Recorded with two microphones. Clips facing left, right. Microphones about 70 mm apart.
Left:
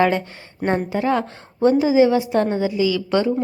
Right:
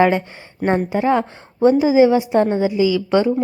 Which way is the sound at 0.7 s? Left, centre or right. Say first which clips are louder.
Right 3 dB; right.